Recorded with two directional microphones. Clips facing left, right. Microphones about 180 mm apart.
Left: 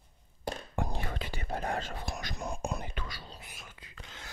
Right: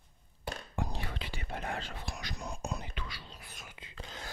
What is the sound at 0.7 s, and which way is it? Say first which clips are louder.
Whispering: left 2 dB; 50° left (ahead or behind).